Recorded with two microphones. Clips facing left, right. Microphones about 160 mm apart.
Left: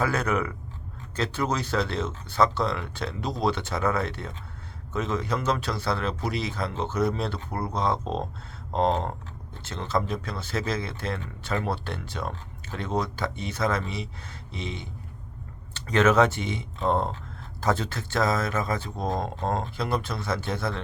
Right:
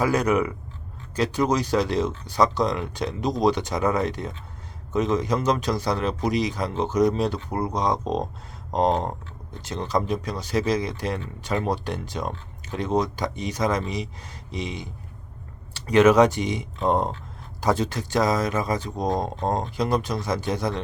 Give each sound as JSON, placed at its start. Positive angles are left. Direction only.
{"t": 0.0, "sound": "speech", "side_deg": -15}